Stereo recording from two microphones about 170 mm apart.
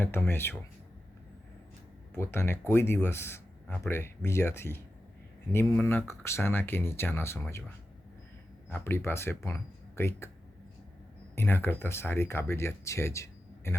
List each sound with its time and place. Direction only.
0.0 s speech: 15° left (ahead or behind)
2.1 s speech: 15° left (ahead or behind)
8.7 s speech: 15° left (ahead or behind)
11.3 s speech: 15° left (ahead or behind)